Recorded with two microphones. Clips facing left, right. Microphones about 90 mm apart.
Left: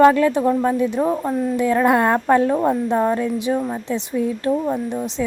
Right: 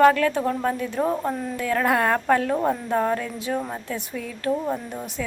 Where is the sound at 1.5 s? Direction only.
20° left (ahead or behind).